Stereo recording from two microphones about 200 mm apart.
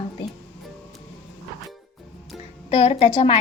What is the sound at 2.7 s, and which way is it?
Speech, 30° left (ahead or behind).